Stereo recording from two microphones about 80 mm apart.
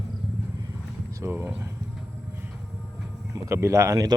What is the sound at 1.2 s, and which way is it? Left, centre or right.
Speech, right.